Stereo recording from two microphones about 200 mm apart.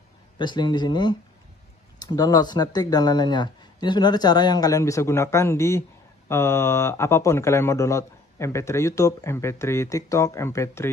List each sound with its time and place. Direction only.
0.4 s speech: 20° left (ahead or behind)